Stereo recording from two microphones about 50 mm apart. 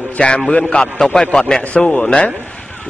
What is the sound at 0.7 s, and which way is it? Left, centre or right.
A man's voice, centre.